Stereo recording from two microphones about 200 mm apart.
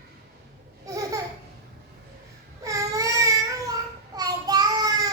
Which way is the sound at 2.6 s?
15° right (ahead or behind).